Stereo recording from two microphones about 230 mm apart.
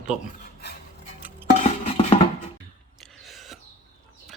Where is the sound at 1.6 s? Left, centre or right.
Left.